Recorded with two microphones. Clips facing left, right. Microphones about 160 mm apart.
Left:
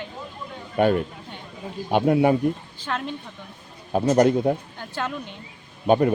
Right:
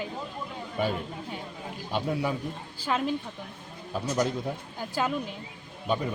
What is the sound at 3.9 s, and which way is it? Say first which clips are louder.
Speech: left 10 dB; 65° left (ahead or behind).